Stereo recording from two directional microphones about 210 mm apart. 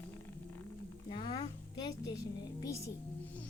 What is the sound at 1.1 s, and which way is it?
A woman's voice, 25° left (ahead or behind).